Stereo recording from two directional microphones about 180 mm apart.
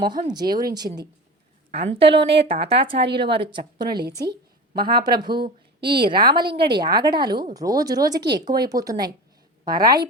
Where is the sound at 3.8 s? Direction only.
60° right (ahead or behind).